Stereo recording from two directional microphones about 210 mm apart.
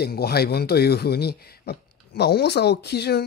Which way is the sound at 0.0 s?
50° left (ahead or behind).